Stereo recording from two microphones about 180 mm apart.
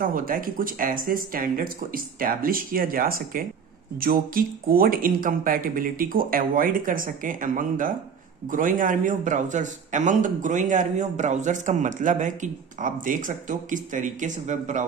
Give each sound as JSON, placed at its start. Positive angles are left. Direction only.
{"t": 0.0, "sound": "a man's voice", "side_deg": -50}